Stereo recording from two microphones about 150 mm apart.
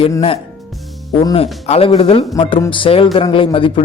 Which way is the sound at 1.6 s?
45° left (ahead or behind).